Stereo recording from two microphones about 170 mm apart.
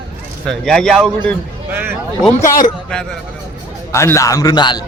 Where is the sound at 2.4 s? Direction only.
50° left (ahead or behind).